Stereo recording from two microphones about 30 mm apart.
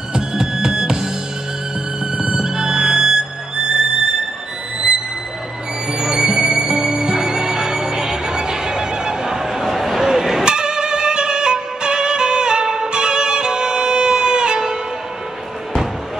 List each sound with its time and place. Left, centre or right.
0.4 s music: right
2.1 s music: right
5.9 s music: right